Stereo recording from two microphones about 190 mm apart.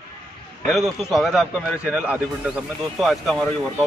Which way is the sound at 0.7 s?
Centre (ahead or behind).